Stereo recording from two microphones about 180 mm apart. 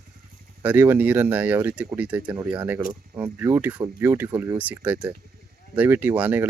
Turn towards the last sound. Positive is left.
turn(degrees=-10)  # may be behind; listen again after turning